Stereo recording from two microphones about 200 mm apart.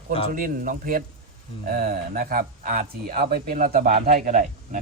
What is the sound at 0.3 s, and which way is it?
Speech, 40° right (ahead or behind).